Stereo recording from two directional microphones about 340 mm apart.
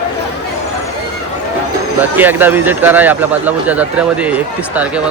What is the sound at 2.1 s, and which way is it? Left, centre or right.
Speech, centre.